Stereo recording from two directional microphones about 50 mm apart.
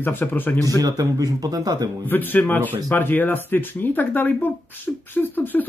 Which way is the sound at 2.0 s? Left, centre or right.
Left.